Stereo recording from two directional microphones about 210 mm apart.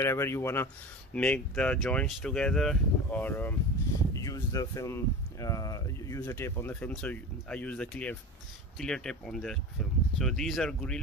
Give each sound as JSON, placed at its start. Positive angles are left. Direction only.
{"t": 0.0, "sound": "speech", "side_deg": 10}